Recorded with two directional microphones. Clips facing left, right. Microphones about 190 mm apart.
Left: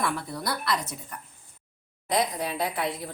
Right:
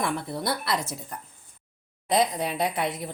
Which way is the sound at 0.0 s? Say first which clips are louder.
Right 2 dB; 25° right (ahead or behind).